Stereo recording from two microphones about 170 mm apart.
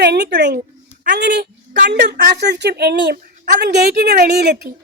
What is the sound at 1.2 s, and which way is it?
Speech, 90° right.